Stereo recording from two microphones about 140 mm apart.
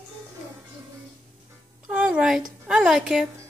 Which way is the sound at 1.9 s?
5° right (ahead or behind).